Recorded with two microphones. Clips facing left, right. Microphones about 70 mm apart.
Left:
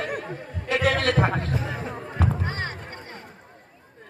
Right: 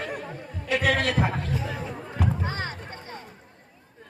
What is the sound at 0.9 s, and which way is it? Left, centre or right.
Speech, left.